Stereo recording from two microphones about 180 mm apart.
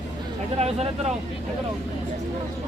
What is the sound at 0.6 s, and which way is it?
Speech, 35° right (ahead or behind).